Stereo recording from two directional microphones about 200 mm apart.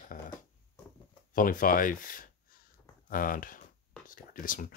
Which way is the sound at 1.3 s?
45° left (ahead or behind).